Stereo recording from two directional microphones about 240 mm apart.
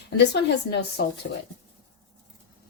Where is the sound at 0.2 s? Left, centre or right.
Left.